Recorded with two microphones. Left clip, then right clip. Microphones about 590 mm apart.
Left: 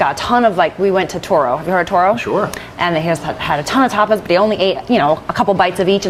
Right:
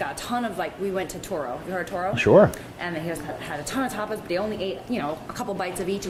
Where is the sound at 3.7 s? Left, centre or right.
Left.